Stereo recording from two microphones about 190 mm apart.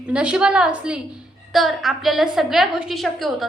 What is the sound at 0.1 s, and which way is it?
A woman's voice, 5° right (ahead or behind).